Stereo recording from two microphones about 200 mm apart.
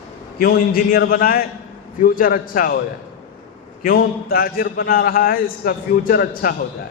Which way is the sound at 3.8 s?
45° left (ahead or behind).